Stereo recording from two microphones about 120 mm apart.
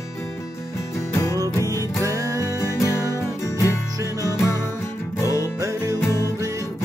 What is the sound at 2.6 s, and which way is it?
Music, 25° left (ahead or behind).